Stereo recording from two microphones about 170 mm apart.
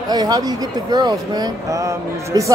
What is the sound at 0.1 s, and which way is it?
Speech, 20° right (ahead or behind).